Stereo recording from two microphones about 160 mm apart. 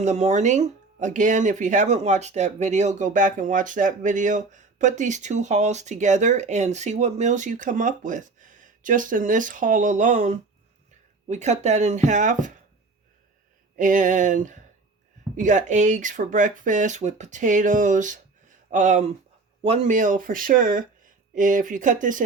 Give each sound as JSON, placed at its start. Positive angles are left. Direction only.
{"t": 0.0, "sound": "speech", "side_deg": -45}
{"t": 13.7, "sound": "speech", "side_deg": -55}